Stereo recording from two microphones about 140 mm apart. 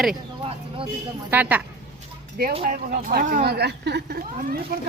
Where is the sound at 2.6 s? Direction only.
90° right.